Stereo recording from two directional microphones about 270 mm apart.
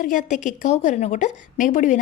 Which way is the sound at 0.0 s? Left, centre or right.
Left.